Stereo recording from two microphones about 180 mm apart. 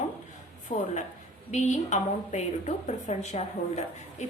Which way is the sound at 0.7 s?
40° left (ahead or behind).